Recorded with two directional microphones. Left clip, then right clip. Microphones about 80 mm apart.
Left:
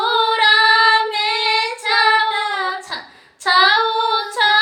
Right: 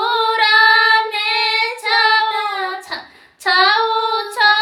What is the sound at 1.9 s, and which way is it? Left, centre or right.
Female singing, right.